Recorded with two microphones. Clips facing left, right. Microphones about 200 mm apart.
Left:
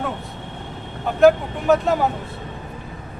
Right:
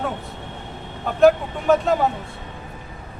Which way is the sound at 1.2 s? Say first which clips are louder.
Left 1 dB; centre (ahead or behind).